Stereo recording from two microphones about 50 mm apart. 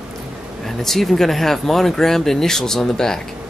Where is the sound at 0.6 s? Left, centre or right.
Centre.